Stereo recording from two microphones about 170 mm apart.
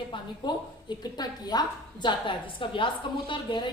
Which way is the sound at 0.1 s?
25° left (ahead or behind).